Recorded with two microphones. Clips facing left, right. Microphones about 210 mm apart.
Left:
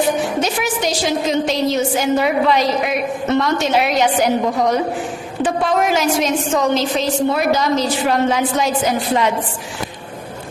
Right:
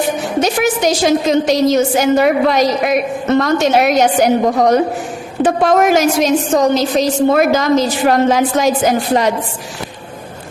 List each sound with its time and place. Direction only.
0.4 s a woman's voice: 45° right (ahead or behind)